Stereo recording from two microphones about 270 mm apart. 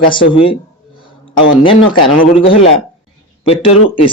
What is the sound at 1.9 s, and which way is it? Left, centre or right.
Speech, centre.